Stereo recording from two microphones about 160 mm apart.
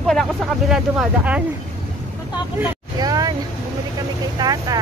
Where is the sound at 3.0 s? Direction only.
25° right (ahead or behind).